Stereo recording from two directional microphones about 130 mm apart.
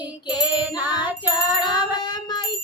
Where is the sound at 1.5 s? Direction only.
35° left (ahead or behind).